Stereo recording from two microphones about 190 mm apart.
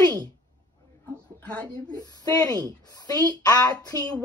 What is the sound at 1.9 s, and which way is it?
A woman's voice, 20° left (ahead or behind).